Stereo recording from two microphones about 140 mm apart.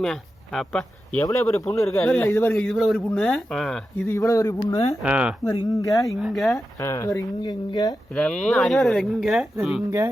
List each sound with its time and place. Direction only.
0.0 s speech: centre (ahead or behind)
1.2 s speech: 20° left (ahead or behind)
1.6 s speech: centre (ahead or behind)
4.0 s speech: 20° left (ahead or behind)
5.0 s speech: 10° right (ahead or behind)
5.8 s speech: 25° left (ahead or behind)
6.1 s speech: 5° right (ahead or behind)
6.7 s speech: 20° left (ahead or behind)
8.1 s speech: 5° left (ahead or behind)